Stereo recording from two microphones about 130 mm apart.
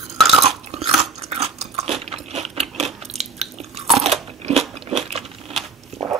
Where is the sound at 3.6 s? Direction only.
50° right (ahead or behind).